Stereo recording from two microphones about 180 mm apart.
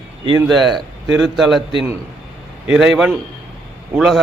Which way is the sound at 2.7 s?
Centre (ahead or behind).